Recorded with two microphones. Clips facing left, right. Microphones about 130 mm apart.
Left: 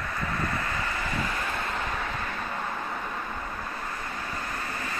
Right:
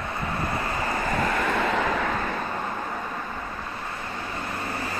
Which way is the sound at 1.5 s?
90° right.